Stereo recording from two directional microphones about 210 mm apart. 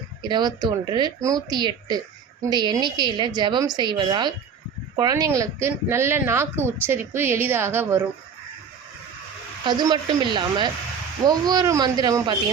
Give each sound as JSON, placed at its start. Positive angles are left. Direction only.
{"t": 0.2, "sound": "speech", "side_deg": -20}
{"t": 9.6, "sound": "speech", "side_deg": -20}